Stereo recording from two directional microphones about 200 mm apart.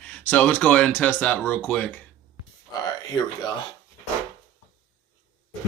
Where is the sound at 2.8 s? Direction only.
20° left (ahead or behind).